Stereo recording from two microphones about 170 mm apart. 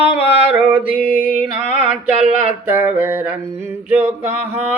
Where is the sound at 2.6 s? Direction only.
10° right (ahead or behind).